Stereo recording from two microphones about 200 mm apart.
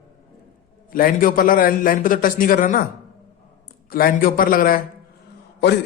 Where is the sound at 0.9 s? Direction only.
45° left (ahead or behind).